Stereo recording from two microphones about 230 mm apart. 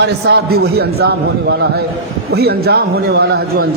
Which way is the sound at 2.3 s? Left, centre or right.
Right.